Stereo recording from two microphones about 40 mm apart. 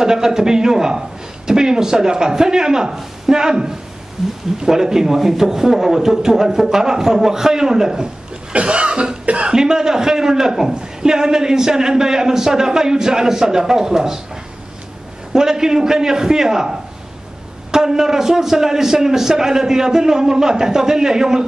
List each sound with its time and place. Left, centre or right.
0.0 s a man's voice: centre
8.5 s cough: right
9.5 s a man's voice: centre
15.3 s a man's voice: centre